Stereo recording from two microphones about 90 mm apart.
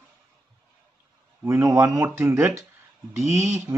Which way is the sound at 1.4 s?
35° right (ahead or behind).